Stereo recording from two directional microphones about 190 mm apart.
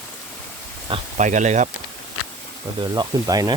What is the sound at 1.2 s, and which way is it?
Speech, 40° right (ahead or behind).